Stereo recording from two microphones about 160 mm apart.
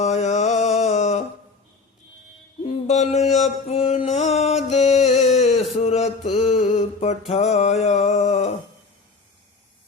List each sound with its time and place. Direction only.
0.0 s mantra: 45° left (ahead or behind)
2.6 s mantra: 45° left (ahead or behind)